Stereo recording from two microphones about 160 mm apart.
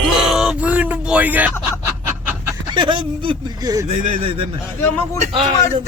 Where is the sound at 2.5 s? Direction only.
30° right (ahead or behind).